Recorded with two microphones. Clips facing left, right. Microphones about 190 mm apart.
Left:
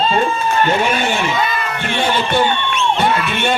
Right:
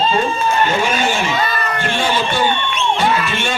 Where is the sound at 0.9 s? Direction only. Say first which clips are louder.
Even; 60° left (ahead or behind).